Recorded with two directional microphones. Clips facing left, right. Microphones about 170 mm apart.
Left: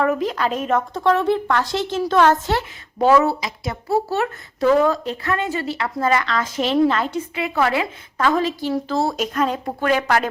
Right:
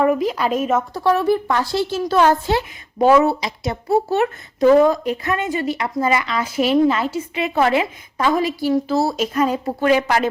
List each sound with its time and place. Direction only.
0.0 s speech: 10° right (ahead or behind)
7.3 s a woman's voice: 20° right (ahead or behind); by 10.2 s 5° right (ahead or behind)